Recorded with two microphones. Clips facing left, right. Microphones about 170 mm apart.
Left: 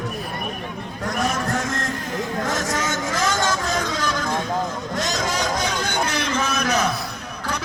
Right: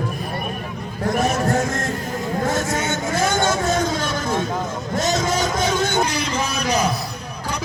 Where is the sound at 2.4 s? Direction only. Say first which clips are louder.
Right 5 dB; 25° right (ahead or behind).